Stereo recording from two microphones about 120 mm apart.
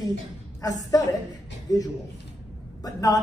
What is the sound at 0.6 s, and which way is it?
A man's voice, 30° left (ahead or behind).